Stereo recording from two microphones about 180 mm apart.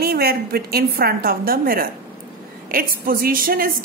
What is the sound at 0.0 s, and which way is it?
A woman's voice, 60° right (ahead or behind).